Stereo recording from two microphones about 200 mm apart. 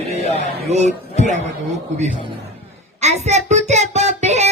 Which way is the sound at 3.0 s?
35° right (ahead or behind).